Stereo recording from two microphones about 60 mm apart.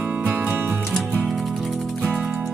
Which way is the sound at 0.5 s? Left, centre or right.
Right.